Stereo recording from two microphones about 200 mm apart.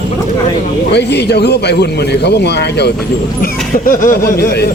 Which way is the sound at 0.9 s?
55° left (ahead or behind).